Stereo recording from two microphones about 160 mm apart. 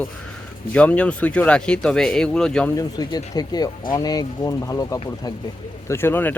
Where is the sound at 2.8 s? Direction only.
25° left (ahead or behind).